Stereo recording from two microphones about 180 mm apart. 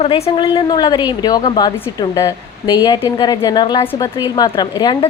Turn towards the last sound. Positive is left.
turn(degrees=20)  # may be behind; listen again after turning